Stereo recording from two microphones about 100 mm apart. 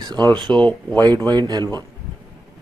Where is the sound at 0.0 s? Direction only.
45° right (ahead or behind).